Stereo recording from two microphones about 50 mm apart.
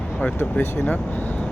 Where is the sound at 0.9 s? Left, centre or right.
Left.